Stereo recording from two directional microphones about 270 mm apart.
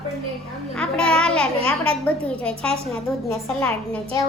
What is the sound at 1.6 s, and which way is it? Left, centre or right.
Speech, right.